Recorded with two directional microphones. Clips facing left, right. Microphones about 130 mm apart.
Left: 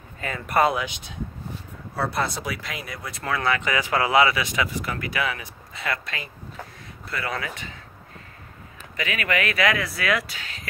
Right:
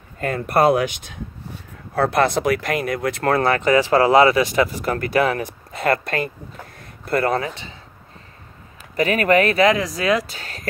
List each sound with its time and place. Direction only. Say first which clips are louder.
0.2 s speech: right 4 dB; 45° right (ahead or behind)
2.0 s speech: right 9 dB; 75° right (ahead or behind)
3.3 s speech: right 6 dB; 40° right (ahead or behind)
7.3 s speech: right 8 dB; 30° right (ahead or behind)
8.9 s speech: right 10 dB; 40° right (ahead or behind)